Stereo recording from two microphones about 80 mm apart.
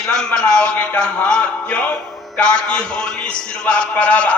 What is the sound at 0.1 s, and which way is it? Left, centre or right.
A man's voice, centre.